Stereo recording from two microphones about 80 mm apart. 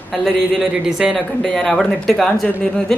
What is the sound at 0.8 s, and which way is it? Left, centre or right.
Speech, centre.